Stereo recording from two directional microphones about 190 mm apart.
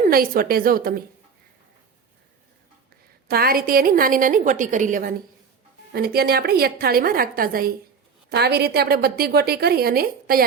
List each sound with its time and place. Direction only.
0.1 s a woman's voice: 50° right (ahead or behind)
3.2 s a woman's voice: 50° right (ahead or behind)
5.9 s a woman's voice: 55° right (ahead or behind)